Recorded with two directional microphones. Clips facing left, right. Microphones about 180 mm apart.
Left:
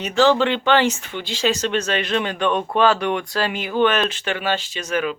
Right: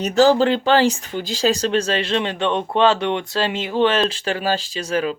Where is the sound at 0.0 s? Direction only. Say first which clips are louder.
Right 2 dB; 40° right (ahead or behind).